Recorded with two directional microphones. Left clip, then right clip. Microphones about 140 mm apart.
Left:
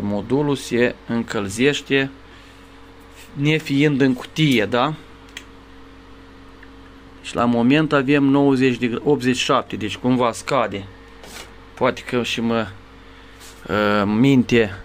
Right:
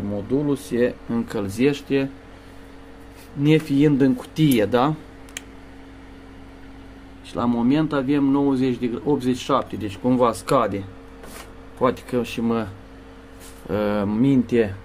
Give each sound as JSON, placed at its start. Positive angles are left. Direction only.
{"t": 0.5, "sound": "speech", "side_deg": 15}
{"t": 3.4, "sound": "speech", "side_deg": 0}
{"t": 7.2, "sound": "speech", "side_deg": 25}
{"t": 11.8, "sound": "speech", "side_deg": 5}
{"t": 13.7, "sound": "speech", "side_deg": 5}
{"t": 14.2, "sound": "speech", "side_deg": 30}